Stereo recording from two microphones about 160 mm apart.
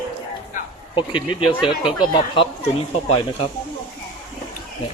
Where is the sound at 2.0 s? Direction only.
30° left (ahead or behind).